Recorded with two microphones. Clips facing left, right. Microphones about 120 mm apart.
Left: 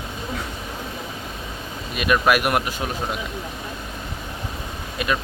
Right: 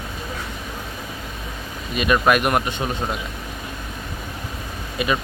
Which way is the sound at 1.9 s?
Centre (ahead or behind).